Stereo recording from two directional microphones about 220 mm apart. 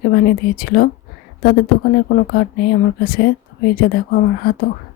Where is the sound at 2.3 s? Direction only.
45° left (ahead or behind).